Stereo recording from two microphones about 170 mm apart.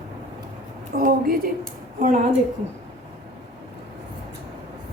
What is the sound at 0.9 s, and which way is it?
A woman's voice, 55° right (ahead or behind).